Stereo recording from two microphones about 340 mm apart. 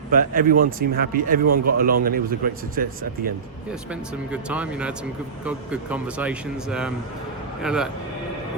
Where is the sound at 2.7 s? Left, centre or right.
Right.